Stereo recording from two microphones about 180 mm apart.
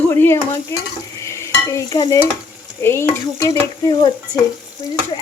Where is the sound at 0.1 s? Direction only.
15° left (ahead or behind).